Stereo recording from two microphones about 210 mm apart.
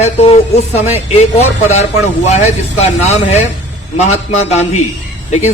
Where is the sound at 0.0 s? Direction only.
30° left (ahead or behind).